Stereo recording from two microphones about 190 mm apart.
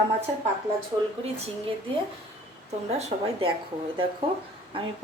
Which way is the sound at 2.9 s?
30° right (ahead or behind).